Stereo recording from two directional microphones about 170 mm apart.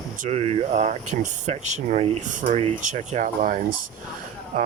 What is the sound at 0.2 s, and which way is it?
Speech, 40° right (ahead or behind).